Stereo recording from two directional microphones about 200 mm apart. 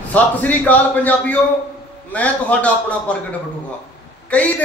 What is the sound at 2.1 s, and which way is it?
A man's voice, 5° left (ahead or behind).